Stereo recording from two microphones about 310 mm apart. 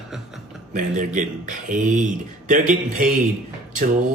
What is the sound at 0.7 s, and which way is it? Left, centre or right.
Speech, right.